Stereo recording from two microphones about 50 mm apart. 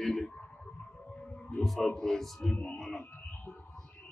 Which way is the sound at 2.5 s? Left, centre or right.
Left.